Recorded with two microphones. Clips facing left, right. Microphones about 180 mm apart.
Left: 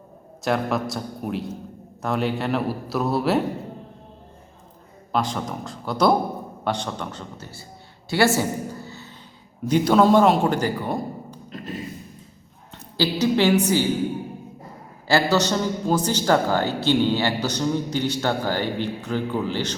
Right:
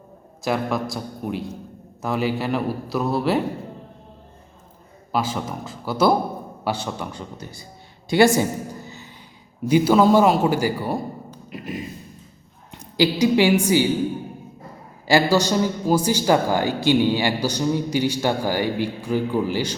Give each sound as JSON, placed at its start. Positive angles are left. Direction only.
{"t": 0.4, "sound": "a man's voice", "side_deg": 0}
{"t": 5.1, "sound": "a man's voice", "side_deg": -5}
{"t": 9.6, "sound": "a man's voice", "side_deg": -5}
{"t": 11.4, "sound": "a sound", "side_deg": -10}
{"t": 12.7, "sound": "a woman's voice", "side_deg": -10}
{"t": 15.0, "sound": "a man's voice", "side_deg": -15}